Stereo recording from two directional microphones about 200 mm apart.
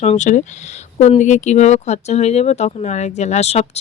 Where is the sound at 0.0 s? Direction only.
35° left (ahead or behind).